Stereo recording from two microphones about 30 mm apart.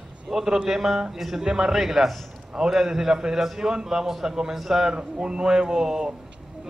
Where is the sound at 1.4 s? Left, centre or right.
Right.